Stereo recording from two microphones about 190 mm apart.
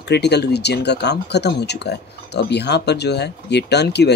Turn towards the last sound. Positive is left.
turn(degrees=60)  # may be behind; listen again after turning